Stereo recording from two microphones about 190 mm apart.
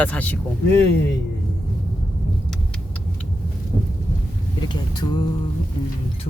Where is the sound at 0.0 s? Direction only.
10° left (ahead or behind).